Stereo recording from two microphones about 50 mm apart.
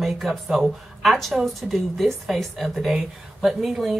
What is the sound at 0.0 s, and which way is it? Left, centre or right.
Speech, centre.